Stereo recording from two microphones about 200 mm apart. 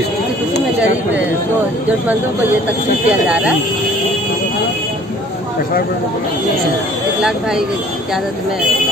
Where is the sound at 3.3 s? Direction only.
5° right (ahead or behind).